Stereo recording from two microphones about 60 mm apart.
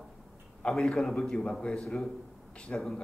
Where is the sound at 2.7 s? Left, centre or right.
Left.